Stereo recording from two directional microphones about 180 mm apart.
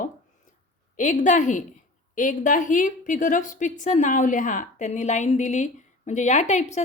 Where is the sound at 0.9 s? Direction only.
45° left (ahead or behind).